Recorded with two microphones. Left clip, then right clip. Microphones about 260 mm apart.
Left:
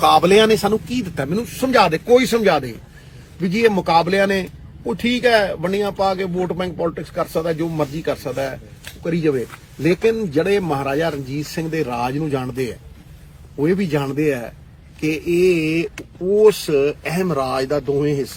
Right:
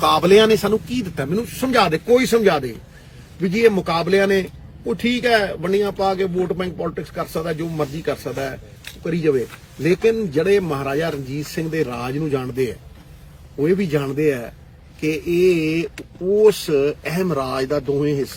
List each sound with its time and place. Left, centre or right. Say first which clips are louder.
0.0 s a man's voice: left 1 dB; centre